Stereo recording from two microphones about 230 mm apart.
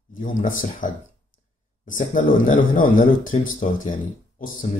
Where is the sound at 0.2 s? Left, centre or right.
Left.